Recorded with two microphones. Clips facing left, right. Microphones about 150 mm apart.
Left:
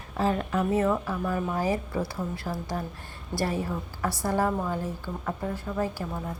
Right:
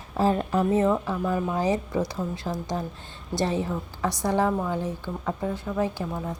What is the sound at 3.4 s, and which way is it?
Speech, 20° right (ahead or behind).